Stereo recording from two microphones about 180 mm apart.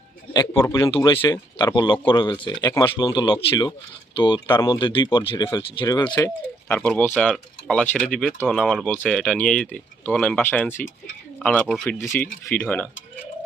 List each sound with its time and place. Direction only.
0.3 s speech: 15° left (ahead or behind)
0.9 s speech: 30° left (ahead or behind)
3.0 s speech: 25° left (ahead or behind); by 12.9 s 10° left (ahead or behind)